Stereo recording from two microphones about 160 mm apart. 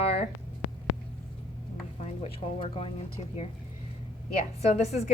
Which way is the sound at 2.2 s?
35° left (ahead or behind).